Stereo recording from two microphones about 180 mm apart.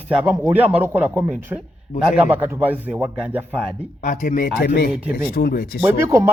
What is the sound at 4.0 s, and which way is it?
Speech, 50° left (ahead or behind).